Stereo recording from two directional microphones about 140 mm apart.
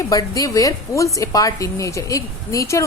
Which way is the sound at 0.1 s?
25° left (ahead or behind).